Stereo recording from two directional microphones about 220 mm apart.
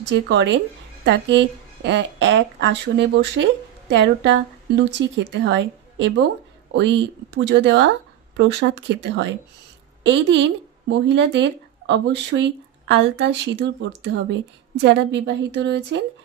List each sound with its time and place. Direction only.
0.3 s speech: 55° right (ahead or behind)